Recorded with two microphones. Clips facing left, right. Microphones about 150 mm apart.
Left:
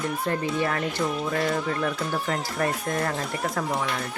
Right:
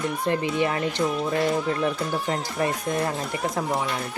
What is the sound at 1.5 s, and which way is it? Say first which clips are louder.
Speech: right 2 dB; 25° right (ahead or behind).